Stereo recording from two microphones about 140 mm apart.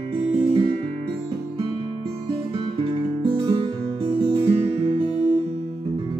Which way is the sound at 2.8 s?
40° right (ahead or behind).